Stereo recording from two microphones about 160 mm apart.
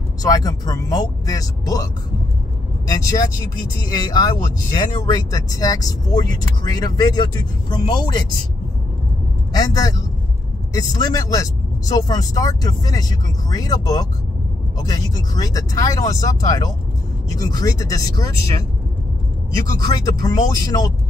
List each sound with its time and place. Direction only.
0.2 s speech: 25° left (ahead or behind)
3.9 s speech: 25° left (ahead or behind)
9.5 s speech: 25° left (ahead or behind)
19.8 s speech: 25° left (ahead or behind)